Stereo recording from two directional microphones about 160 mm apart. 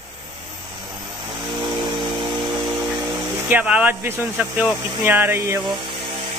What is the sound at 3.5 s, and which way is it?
Speech, 10° right (ahead or behind).